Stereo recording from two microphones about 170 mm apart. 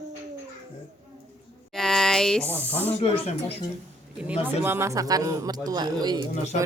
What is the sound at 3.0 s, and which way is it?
Speech, 35° left (ahead or behind).